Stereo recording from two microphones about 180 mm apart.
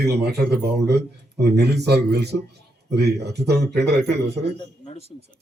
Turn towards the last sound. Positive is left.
turn(degrees=25)  # may be behind; listen again after turning